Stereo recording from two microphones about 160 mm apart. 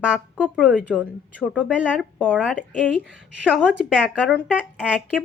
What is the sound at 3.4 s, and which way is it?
Speech, 5° right (ahead or behind).